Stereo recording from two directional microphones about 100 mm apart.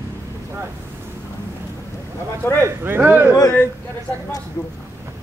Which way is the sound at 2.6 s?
20° right (ahead or behind).